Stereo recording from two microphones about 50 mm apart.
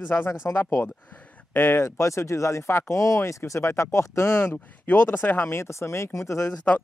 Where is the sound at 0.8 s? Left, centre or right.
Left.